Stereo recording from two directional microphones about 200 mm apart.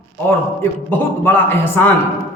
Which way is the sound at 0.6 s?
10° left (ahead or behind).